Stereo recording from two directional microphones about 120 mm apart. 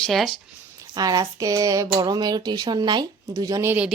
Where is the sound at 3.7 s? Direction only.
10° right (ahead or behind).